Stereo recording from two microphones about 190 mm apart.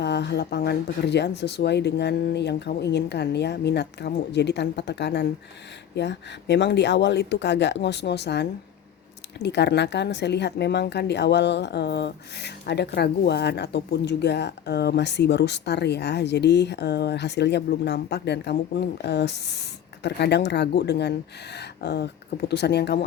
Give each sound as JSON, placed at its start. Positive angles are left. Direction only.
{"t": 0.0, "sound": "a woman's voice", "side_deg": 65}